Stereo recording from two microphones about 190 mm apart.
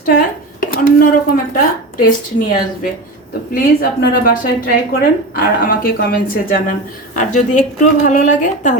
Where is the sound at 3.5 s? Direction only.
50° left (ahead or behind).